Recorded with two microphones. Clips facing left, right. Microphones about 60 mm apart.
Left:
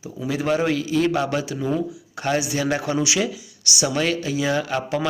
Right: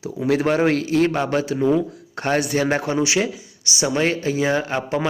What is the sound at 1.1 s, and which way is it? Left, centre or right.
A man's voice, right.